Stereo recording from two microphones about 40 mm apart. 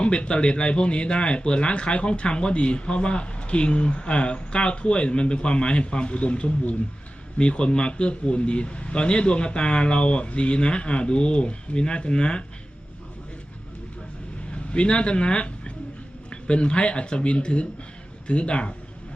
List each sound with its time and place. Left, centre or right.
0.0 s speech: left
14.5 s speech: left